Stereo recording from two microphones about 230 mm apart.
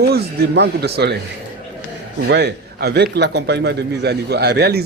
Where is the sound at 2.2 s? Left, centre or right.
Right.